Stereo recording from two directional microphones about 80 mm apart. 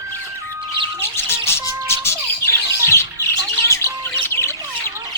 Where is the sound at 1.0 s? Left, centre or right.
Left.